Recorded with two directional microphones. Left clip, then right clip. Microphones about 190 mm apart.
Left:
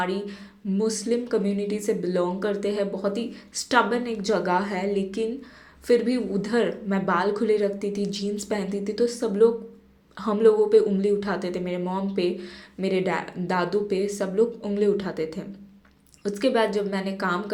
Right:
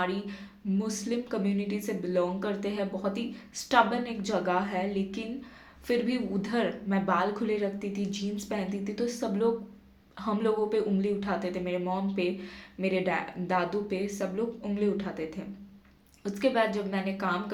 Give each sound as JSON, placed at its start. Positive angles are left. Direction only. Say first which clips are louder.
{"t": 0.0, "sound": "speech", "louder": "left 4 dB", "side_deg": 20}